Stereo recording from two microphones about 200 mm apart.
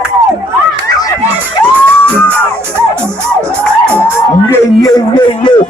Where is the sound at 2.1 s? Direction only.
10° left (ahead or behind).